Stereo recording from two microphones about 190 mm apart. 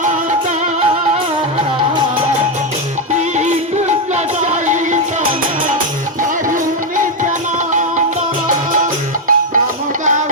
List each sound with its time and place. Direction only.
3.1 s music: 40° right (ahead or behind)
6.5 s music: 45° right (ahead or behind)